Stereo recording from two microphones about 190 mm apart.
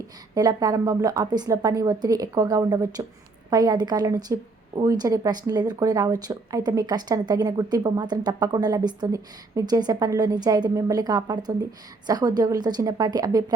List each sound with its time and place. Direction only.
0.3 s a woman's voice: 20° right (ahead or behind)